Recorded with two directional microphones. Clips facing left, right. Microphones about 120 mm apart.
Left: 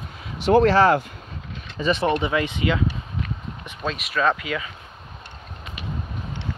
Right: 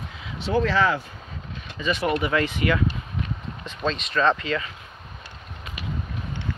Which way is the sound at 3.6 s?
5° left (ahead or behind).